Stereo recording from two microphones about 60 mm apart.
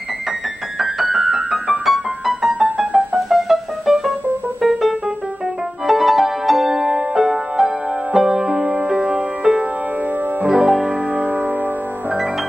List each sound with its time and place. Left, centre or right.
1.0 s keyboard: centre
2.6 s music: centre
3.3 s music: centre